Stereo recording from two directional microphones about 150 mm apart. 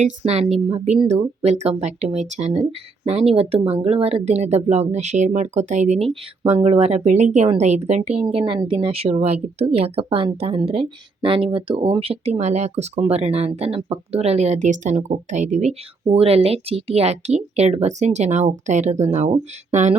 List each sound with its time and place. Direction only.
0.0 s a woman's voice: 45° right (ahead or behind)